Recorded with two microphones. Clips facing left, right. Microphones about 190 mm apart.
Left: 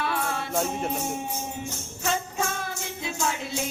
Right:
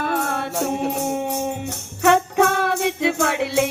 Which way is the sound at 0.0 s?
50° right (ahead or behind).